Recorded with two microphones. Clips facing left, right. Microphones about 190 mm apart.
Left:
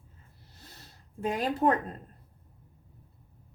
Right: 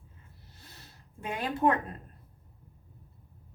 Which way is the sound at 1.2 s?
35° left (ahead or behind).